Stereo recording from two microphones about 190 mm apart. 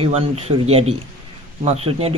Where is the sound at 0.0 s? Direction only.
30° right (ahead or behind).